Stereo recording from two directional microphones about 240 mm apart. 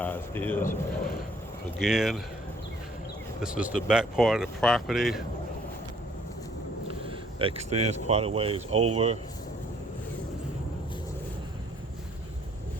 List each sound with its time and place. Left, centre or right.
0.0 s a sound: centre
0.6 s a man's voice: left
1.8 s speech: centre
3.4 s speech: centre
7.3 s speech: right